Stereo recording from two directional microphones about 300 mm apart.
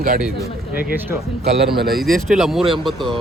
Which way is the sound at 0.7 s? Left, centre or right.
Right.